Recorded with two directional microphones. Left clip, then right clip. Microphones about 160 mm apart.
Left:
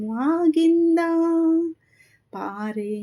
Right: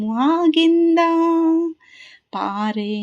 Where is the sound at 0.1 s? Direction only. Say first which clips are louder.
Right 4 dB; 20° right (ahead or behind).